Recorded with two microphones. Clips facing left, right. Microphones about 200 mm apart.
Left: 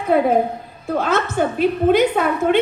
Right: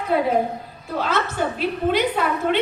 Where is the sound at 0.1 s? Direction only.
50° left (ahead or behind).